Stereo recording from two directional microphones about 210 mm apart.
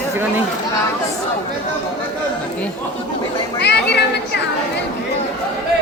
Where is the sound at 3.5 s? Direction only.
50° left (ahead or behind).